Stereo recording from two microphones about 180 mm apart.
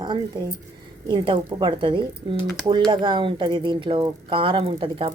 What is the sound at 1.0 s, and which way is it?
Speech, 25° right (ahead or behind).